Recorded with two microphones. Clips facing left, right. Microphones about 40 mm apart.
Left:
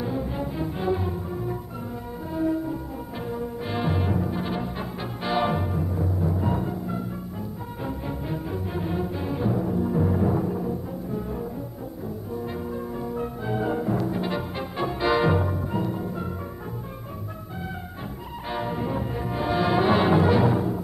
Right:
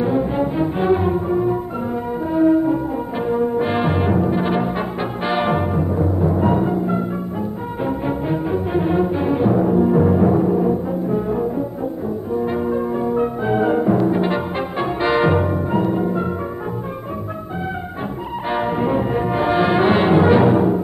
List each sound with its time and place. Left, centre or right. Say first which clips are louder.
0.0 s music: right 10 dB; right
10.6 s brass instrument: right 11 dB; right
18.5 s brass instrument: right 9 dB; right